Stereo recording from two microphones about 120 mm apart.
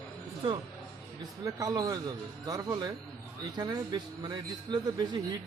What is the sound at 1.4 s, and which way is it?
Speech, 30° right (ahead or behind).